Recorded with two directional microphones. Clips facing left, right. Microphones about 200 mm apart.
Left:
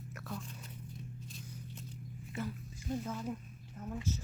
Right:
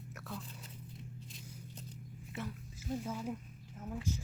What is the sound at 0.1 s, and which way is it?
Biting, centre (ahead or behind).